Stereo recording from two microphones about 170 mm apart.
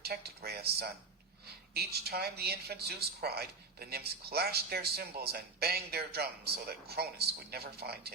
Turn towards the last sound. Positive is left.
turn(degrees=-70)  # may be behind; listen again after turning